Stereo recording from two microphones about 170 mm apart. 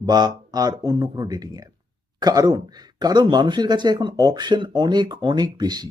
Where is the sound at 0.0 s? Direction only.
25° right (ahead or behind).